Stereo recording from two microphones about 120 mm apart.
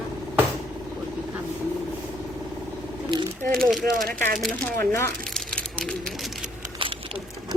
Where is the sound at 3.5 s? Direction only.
Centre (ahead or behind).